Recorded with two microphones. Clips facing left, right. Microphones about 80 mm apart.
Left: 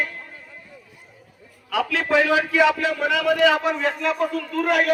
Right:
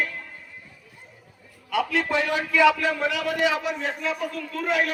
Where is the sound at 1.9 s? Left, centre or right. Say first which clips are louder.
Left 2 dB; left.